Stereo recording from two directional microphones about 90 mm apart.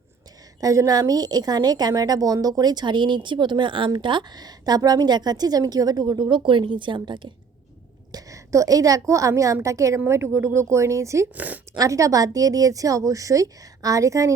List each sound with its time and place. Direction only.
0.6 s a woman's voice: 40° right (ahead or behind); by 7.3 s 60° right (ahead or behind)
8.1 s a woman's voice: 40° right (ahead or behind)
11.3 s speech: 15° right (ahead or behind)
11.8 s a woman's voice: 40° right (ahead or behind)